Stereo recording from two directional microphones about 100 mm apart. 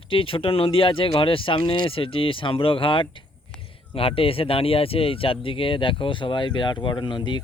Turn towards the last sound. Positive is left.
turn(degrees=50)  # may be behind; listen again after turning